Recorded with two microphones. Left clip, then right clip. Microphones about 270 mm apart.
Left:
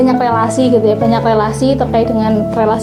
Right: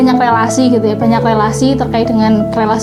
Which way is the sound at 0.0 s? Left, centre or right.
Right.